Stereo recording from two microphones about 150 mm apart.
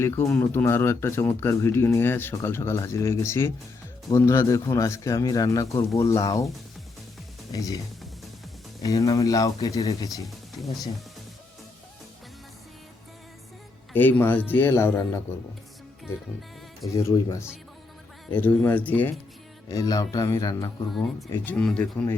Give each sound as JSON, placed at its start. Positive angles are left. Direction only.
{"t": 0.0, "sound": "a man's voice", "side_deg": 20}
{"t": 7.5, "sound": "a man's voice", "side_deg": 20}
{"t": 8.8, "sound": "a man's voice", "side_deg": 25}
{"t": 10.2, "sound": "speech", "side_deg": 0}
{"t": 13.9, "sound": "speech", "side_deg": 15}
{"t": 16.9, "sound": "a man's voice", "side_deg": 20}
{"t": 19.7, "sound": "a man's voice", "side_deg": 25}
{"t": 20.9, "sound": "speech", "side_deg": 0}
{"t": 21.3, "sound": "speech", "side_deg": 10}